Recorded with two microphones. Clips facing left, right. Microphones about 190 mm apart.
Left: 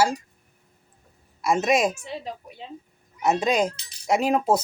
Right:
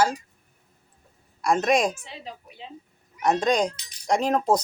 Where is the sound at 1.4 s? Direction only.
5° left (ahead or behind).